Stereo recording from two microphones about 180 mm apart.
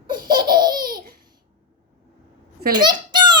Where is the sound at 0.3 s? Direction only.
25° right (ahead or behind).